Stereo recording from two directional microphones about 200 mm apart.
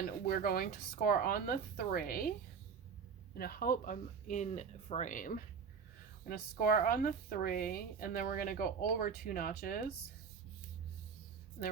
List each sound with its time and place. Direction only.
0.3 s a woman's voice: 45° left (ahead or behind)
3.3 s a woman's voice: 50° left (ahead or behind)